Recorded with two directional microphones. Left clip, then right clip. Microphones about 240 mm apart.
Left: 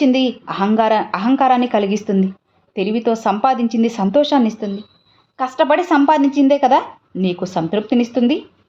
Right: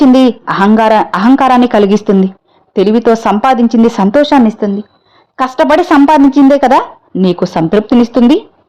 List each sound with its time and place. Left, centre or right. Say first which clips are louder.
0.0 s speech: right 9 dB; right